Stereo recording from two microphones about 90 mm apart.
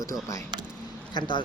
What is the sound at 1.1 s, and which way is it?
Speech, 60° left (ahead or behind).